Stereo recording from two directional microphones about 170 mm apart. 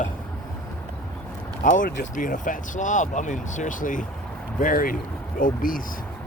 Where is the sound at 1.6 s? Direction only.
50° left (ahead or behind).